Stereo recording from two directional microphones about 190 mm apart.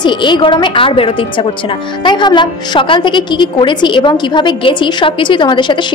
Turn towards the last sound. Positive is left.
turn(degrees=25)  # may be behind; listen again after turning